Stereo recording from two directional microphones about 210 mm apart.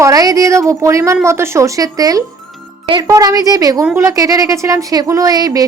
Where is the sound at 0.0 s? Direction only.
15° right (ahead or behind).